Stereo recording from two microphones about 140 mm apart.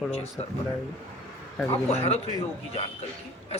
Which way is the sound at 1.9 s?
50° left (ahead or behind).